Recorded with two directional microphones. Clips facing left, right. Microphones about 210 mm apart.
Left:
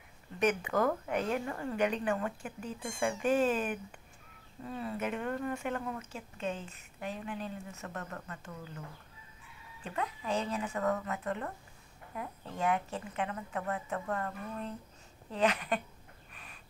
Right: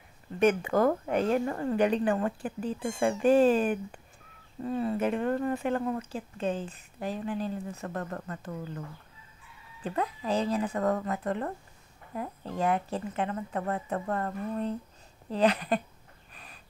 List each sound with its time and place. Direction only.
0.4 s speech: 30° right (ahead or behind)
9.8 s speech: 35° right (ahead or behind)